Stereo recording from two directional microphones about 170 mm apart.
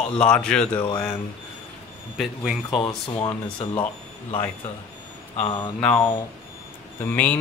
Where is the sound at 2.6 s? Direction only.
30° left (ahead or behind).